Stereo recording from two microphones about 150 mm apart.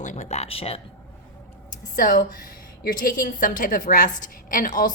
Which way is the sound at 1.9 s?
70° left (ahead or behind).